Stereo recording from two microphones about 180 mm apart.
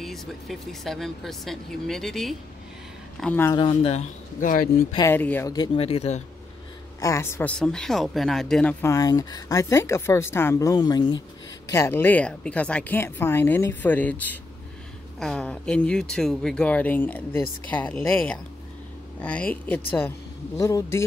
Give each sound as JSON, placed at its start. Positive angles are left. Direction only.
{"t": 0.0, "sound": "a woman's voice", "side_deg": 0}
{"t": 3.5, "sound": "speech", "side_deg": 30}
{"t": 4.9, "sound": "a woman's voice", "side_deg": 15}
{"t": 5.8, "sound": "speech", "side_deg": 35}
{"t": 7.0, "sound": "speech", "side_deg": 15}
{"t": 8.8, "sound": "a woman's voice", "side_deg": 20}